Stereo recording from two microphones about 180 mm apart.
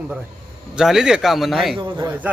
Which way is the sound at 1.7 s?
25° right (ahead or behind).